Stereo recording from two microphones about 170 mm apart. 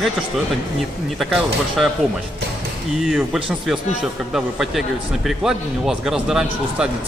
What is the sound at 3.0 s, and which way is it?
A man's voice, centre (ahead or behind).